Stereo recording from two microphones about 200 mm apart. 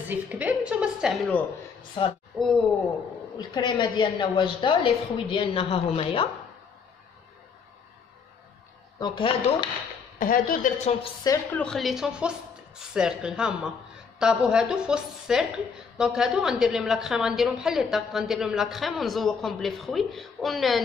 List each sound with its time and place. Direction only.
0.1 s a woman's voice: 10° right (ahead or behind)
3.3 s a woman's voice: 25° left (ahead or behind)
9.0 s a woman's voice: 25° left (ahead or behind)
10.1 s a woman's voice: 45° left (ahead or behind)
11.5 s a woman's voice: 5° left (ahead or behind)